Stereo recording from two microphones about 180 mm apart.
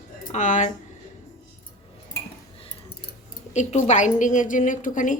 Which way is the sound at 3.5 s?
40° left (ahead or behind).